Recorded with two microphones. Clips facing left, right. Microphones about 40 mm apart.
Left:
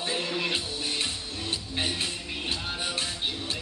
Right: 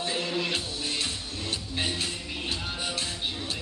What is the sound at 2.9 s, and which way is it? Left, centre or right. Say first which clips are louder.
Music: left 1 dB; left.